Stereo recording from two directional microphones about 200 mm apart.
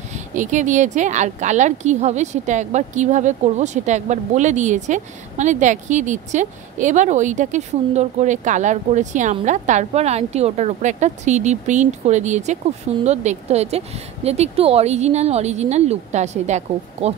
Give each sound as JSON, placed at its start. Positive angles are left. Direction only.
{"t": 0.1, "sound": "speech", "side_deg": -40}